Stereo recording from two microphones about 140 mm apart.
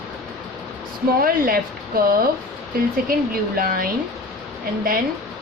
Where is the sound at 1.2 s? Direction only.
90° right.